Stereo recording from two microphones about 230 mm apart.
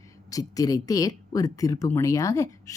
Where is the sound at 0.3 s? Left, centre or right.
Centre.